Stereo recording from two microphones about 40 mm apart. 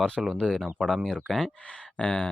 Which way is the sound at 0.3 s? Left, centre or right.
Left.